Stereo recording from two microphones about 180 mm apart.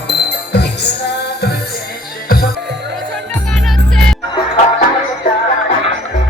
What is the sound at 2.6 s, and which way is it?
Music, 75° right (ahead or behind).